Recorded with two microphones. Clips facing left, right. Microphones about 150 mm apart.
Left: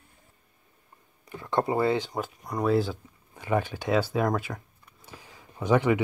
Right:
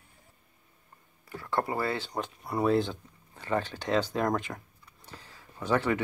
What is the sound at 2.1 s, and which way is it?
Speech, centre (ahead or behind).